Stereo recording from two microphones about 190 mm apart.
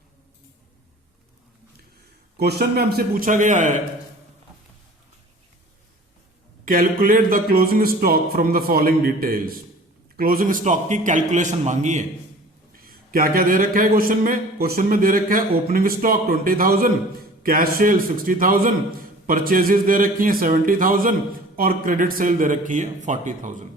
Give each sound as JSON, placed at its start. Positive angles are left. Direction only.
{"t": 2.4, "sound": "a man's voice", "side_deg": -55}
{"t": 6.7, "sound": "a man's voice", "side_deg": -45}